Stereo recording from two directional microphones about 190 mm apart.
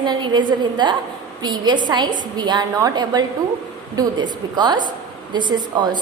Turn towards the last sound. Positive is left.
turn(degrees=-20)  # may be behind; listen again after turning